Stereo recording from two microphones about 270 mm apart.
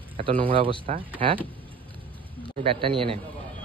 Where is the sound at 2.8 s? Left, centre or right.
Centre.